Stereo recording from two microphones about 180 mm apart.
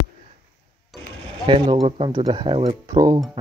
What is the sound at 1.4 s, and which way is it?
Speech, 30° right (ahead or behind).